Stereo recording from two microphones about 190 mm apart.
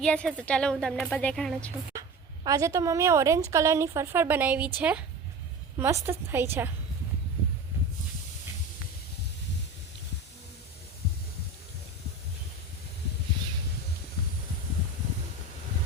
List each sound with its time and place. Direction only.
0.0 s a woman's voice: 5° left (ahead or behind)
1.9 s a woman's voice: 15° right (ahead or behind)